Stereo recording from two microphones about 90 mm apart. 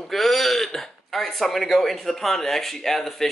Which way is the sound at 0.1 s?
Centre (ahead or behind).